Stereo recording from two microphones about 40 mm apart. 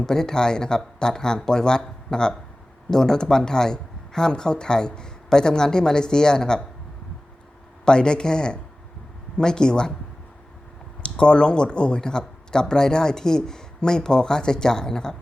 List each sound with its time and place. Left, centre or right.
0.0 s speech: centre
7.9 s a man's voice: left
11.0 s speech: left